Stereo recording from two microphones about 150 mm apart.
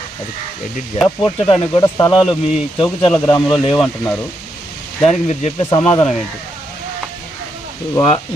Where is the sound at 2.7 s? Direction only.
35° left (ahead or behind).